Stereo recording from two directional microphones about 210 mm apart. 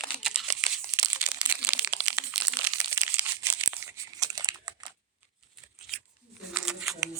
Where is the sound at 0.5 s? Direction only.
15° right (ahead or behind).